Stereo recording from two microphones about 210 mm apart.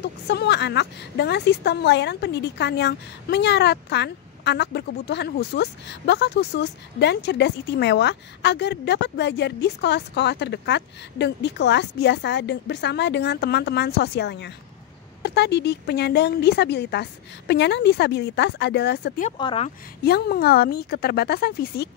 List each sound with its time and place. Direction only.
0.0 s a woman's voice: 50° left (ahead or behind)
19.3 s speech: 25° left (ahead or behind)
20.0 s a woman's voice: 50° left (ahead or behind)